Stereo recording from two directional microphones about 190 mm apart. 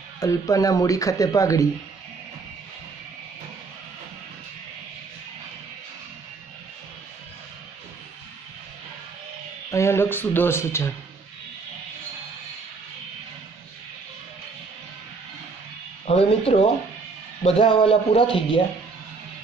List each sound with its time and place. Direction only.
0.2 s speech: 15° left (ahead or behind)
9.7 s speech: 15° left (ahead or behind)
16.1 s a man's voice: 30° left (ahead or behind)